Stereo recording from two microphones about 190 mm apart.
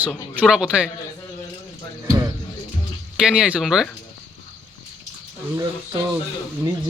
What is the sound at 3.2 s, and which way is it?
Speech, 5° right (ahead or behind).